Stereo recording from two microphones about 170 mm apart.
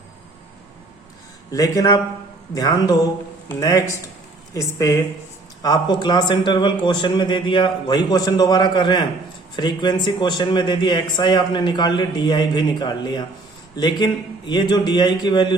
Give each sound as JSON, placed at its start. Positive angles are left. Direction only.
{"t": 1.5, "sound": "speech", "side_deg": 20}